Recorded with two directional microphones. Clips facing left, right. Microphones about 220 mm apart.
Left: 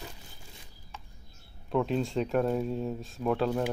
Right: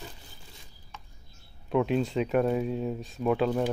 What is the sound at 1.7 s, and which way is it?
Speech, 5° right (ahead or behind).